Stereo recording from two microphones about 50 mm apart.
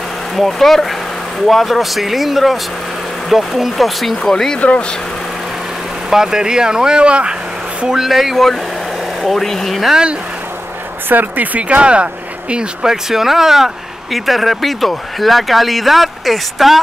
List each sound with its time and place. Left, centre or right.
0.4 s speech: centre
4.6 s speech: left
6.0 s speech: centre
8.1 s speech: centre
11.1 s speech: right
11.6 s speech: right
12.8 s speech: centre